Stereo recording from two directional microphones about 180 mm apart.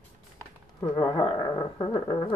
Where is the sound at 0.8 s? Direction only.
20° left (ahead or behind).